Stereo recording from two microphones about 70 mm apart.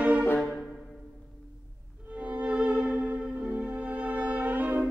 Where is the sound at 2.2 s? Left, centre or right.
Centre.